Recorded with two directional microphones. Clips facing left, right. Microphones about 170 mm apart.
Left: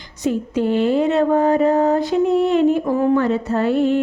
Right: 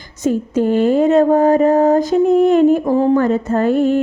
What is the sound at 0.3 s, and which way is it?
Speech, 45° right (ahead or behind).